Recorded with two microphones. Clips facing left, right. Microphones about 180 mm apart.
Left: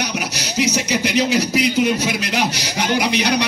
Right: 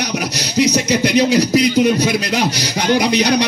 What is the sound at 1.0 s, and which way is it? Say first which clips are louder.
Speech: right 4 dB; 40° right (ahead or behind).